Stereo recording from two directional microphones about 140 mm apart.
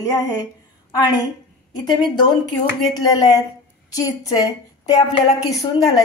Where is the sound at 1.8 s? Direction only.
30° left (ahead or behind).